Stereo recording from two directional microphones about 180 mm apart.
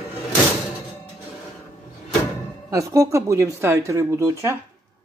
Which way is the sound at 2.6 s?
20° right (ahead or behind).